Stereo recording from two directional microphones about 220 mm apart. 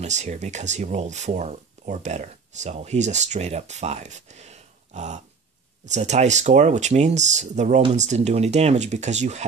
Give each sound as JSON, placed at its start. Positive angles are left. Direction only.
{"t": 0.0, "sound": "speech", "side_deg": -30}